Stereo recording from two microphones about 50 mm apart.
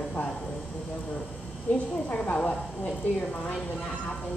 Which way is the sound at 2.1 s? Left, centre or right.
Left.